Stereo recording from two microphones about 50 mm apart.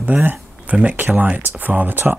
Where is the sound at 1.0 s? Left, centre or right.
Right.